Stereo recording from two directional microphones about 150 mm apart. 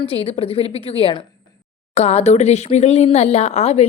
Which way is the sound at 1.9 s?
45° left (ahead or behind).